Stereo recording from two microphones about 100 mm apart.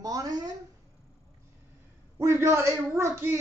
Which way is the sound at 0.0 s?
35° right (ahead or behind).